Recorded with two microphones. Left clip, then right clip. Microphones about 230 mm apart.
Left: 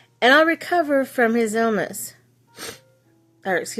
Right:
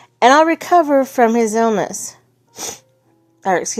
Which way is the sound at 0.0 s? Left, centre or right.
Centre.